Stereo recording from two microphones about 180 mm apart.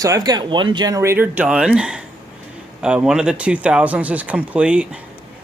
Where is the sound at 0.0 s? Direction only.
20° right (ahead or behind).